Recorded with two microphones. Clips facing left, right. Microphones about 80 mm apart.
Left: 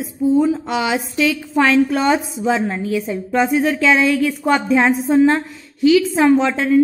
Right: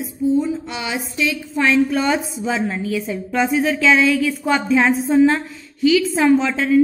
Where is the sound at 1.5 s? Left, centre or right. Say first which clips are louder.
Left 2 dB; left.